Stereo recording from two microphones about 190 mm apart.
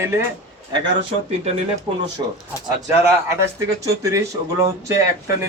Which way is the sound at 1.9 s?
25° right (ahead or behind).